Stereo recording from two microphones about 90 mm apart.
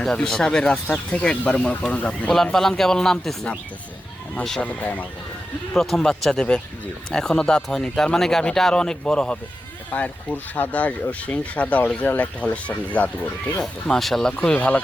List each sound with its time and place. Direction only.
0.0 s speech: 10° left (ahead or behind)
4.8 s speech: 15° left (ahead or behind)
5.7 s speech: 5° left (ahead or behind)